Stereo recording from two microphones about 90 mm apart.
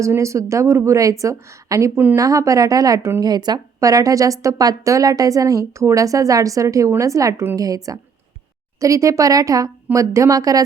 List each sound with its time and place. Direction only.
0.0 s a woman's voice: 35° right (ahead or behind)